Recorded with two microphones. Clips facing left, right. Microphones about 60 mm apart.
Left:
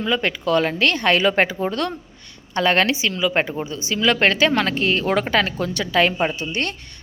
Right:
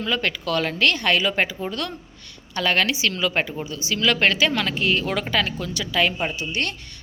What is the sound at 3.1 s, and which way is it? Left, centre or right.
Speech, centre.